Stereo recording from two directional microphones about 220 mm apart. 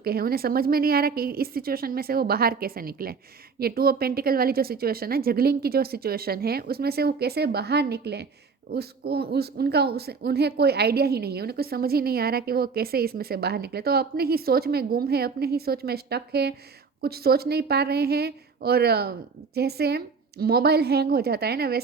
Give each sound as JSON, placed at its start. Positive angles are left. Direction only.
{"t": 0.0, "sound": "speech", "side_deg": -45}